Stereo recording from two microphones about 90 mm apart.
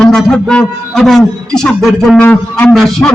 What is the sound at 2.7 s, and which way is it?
Speech, 5° left (ahead or behind).